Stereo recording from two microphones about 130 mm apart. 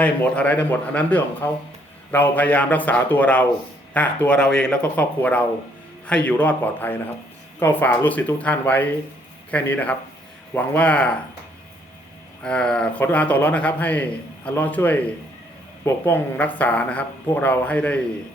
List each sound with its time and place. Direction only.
0.0 s speech: 10° left (ahead or behind)
12.4 s speech: 5° left (ahead or behind)